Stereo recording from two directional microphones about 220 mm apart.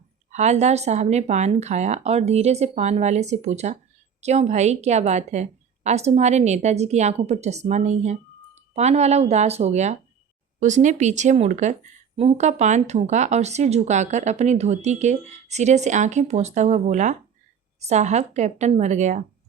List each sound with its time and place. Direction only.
0.3 s speech: 30° right (ahead or behind)